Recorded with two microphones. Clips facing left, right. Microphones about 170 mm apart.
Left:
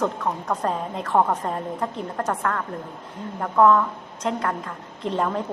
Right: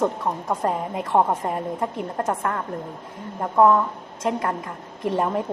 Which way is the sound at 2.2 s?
25° right (ahead or behind).